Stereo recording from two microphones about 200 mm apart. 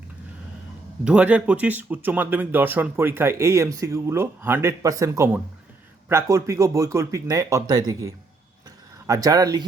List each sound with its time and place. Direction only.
1.0 s speech: 5° right (ahead or behind)